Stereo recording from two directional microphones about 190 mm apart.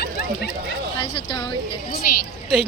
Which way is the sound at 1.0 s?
25° left (ahead or behind).